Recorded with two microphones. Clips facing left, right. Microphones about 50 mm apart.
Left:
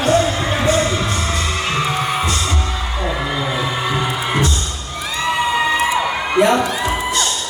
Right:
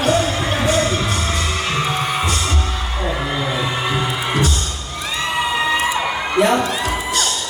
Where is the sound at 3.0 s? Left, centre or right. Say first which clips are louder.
Even; centre.